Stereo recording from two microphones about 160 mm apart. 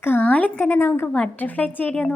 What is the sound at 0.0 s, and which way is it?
A woman's voice, 10° left (ahead or behind).